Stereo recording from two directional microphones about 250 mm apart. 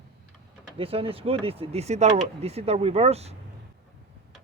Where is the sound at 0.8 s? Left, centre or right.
Right.